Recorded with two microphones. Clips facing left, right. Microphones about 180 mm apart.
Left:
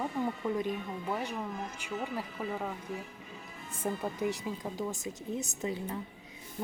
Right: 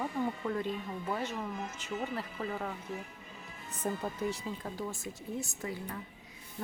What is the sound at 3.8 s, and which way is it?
Speech, 10° left (ahead or behind).